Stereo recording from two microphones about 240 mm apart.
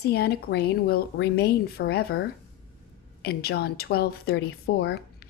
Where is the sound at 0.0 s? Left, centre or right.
Left.